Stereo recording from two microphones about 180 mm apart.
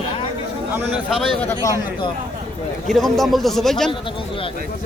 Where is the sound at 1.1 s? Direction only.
Centre (ahead or behind).